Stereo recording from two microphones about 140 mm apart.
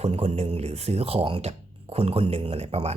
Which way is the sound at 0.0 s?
45° right (ahead or behind).